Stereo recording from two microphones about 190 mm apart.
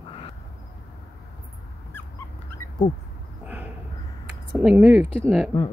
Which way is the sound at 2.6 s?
15° left (ahead or behind).